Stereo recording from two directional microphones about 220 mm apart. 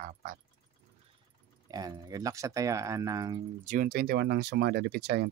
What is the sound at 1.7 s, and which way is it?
Speech, 15° right (ahead or behind).